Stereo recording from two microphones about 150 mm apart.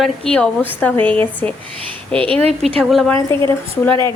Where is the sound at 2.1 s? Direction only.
35° right (ahead or behind).